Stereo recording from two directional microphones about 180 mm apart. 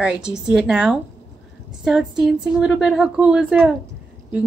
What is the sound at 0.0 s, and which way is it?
A woman's voice, 5° right (ahead or behind).